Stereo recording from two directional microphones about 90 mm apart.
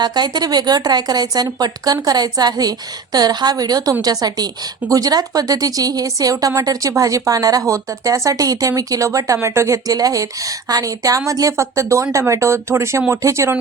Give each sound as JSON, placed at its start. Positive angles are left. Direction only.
{"t": 0.0, "sound": "a woman's voice", "side_deg": -50}